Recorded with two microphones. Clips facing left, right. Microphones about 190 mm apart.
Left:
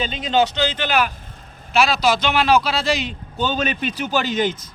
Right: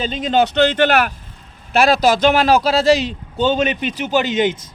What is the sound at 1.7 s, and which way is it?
A man's voice, 50° right (ahead or behind).